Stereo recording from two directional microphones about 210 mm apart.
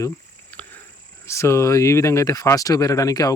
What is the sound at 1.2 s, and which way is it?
Speech, 15° left (ahead or behind).